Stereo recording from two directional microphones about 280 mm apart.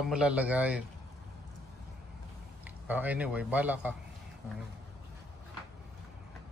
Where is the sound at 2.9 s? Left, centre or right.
Centre.